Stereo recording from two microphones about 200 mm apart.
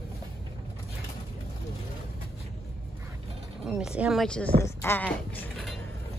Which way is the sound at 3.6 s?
5° right (ahead or behind).